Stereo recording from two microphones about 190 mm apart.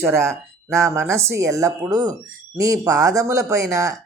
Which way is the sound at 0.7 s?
15° right (ahead or behind).